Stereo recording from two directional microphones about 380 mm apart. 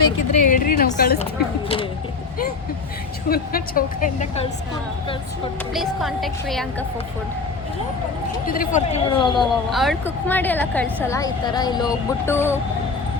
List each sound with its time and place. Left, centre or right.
0.3 s a woman's voice: centre
3.2 s a woman's voice: left
5.7 s a woman's voice: centre
8.4 s speech: left
9.6 s a woman's voice: centre